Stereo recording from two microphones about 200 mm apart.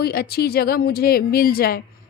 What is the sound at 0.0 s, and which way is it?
Speech, 50° left (ahead or behind).